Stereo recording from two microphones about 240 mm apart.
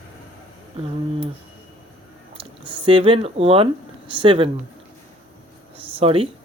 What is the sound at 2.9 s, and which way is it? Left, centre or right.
Speech, right.